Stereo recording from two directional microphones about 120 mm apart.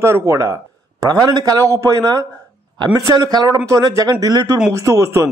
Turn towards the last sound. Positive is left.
turn(degrees=-25)  # may be behind; listen again after turning